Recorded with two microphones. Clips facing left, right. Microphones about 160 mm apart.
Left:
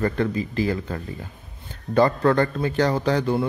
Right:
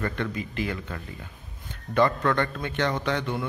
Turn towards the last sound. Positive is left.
turn(degrees=35)  # may be behind; listen again after turning